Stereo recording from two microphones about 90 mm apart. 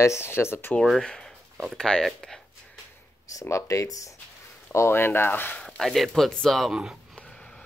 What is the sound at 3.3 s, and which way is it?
Speech, 35° left (ahead or behind).